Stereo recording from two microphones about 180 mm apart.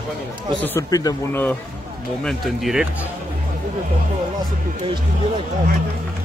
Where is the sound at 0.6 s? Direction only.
15° left (ahead or behind).